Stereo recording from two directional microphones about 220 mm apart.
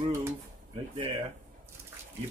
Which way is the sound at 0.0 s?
15° right (ahead or behind).